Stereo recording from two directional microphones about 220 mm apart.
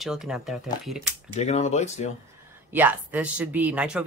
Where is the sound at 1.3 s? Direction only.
30° left (ahead or behind).